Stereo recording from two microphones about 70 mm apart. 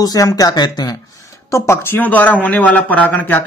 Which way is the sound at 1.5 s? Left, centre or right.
Left.